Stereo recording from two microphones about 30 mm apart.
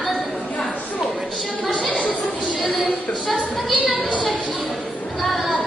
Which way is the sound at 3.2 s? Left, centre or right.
Centre.